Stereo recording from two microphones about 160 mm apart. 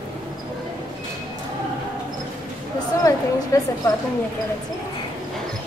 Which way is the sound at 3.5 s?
20° left (ahead or behind).